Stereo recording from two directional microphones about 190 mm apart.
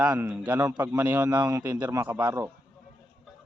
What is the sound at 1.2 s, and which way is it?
Speech, 20° right (ahead or behind).